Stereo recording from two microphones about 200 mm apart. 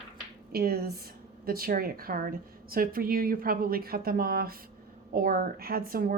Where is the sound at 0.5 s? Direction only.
50° right (ahead or behind).